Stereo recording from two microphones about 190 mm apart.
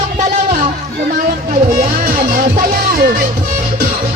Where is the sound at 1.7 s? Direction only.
45° right (ahead or behind).